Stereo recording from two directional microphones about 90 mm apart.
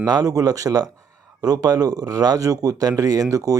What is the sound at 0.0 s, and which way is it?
Speech, 45° right (ahead or behind).